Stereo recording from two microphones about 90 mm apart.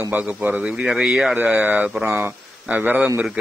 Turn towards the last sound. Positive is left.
turn(degrees=-25)  # may be behind; listen again after turning